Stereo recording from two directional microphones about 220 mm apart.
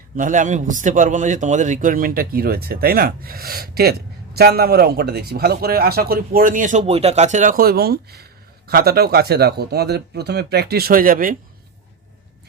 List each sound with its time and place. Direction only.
0.2 s a man's voice: 35° right (ahead or behind)